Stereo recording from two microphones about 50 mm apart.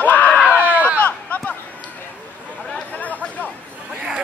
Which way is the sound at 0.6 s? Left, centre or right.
Right.